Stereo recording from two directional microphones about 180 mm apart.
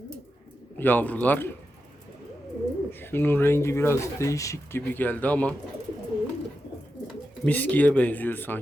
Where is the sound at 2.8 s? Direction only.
10° left (ahead or behind).